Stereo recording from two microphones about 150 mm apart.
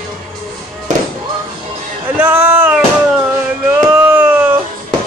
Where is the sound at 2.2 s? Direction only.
15° right (ahead or behind).